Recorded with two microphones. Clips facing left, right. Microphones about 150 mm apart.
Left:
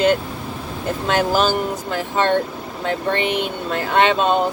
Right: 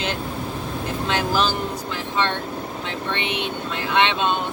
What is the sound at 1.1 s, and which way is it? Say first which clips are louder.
Speech: left 5 dB; 45° left (ahead or behind).